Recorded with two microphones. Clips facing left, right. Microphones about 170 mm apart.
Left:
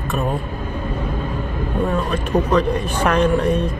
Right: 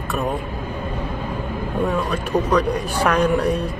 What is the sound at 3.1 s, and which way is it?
Speech, centre (ahead or behind).